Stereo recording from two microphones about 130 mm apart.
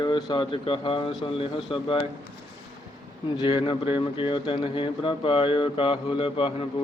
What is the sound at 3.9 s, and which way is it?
Speech, 45° left (ahead or behind).